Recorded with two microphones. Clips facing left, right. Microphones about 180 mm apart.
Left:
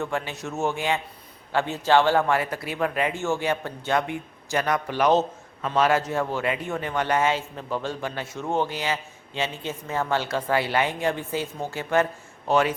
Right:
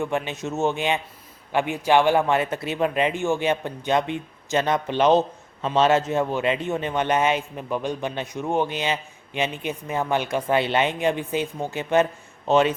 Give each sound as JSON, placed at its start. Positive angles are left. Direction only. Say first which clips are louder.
{"t": 0.0, "sound": "a man's voice", "louder": "right 3 dB", "side_deg": -20}